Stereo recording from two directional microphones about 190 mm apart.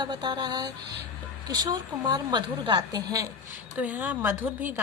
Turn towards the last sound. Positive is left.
turn(degrees=-10)  # may be behind; listen again after turning